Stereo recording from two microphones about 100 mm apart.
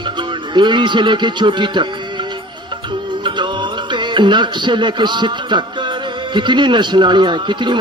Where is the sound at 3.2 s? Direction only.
50° right (ahead or behind).